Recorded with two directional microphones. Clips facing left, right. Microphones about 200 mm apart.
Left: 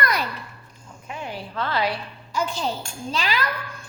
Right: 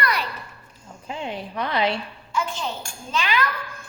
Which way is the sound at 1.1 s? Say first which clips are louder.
Right 2 dB; 25° right (ahead or behind).